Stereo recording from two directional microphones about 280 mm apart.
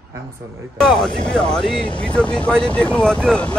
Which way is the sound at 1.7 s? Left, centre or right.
Centre.